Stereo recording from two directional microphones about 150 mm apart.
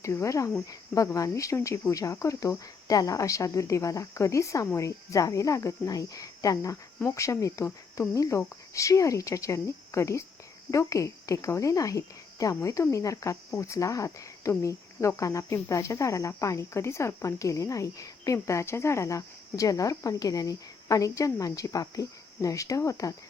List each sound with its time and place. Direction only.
0.0 s cricket: 20° left (ahead or behind)
10.7 s speech: 20° left (ahead or behind)
12.5 s cricket: 20° left (ahead or behind)